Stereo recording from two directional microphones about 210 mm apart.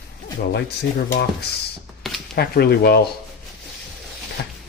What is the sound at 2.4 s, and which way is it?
Speech, 50° left (ahead or behind).